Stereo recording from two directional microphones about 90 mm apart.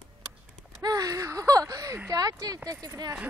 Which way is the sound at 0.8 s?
40° right (ahead or behind).